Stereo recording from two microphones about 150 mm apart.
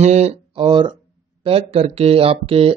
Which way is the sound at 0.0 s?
45° right (ahead or behind).